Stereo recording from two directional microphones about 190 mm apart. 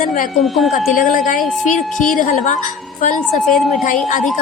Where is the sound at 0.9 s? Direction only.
45° left (ahead or behind).